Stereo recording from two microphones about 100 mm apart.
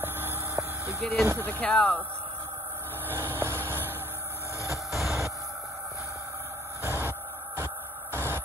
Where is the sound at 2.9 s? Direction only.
20° right (ahead or behind).